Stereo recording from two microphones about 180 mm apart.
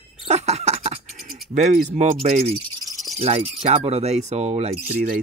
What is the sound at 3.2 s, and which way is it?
Speech, 35° right (ahead or behind).